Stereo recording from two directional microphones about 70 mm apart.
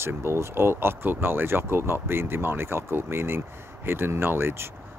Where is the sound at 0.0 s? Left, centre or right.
Right.